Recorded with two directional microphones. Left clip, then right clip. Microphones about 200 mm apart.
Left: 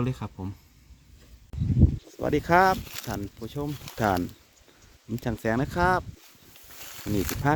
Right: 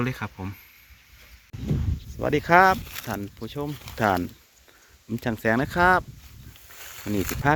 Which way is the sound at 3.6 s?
10° right (ahead or behind).